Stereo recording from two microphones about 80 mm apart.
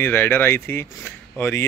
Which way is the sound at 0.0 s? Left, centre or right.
Left.